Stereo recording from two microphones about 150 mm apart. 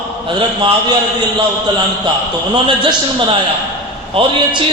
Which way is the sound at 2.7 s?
35° right (ahead or behind).